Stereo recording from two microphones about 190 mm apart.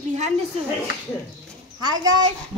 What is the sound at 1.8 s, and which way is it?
Speech, 20° right (ahead or behind).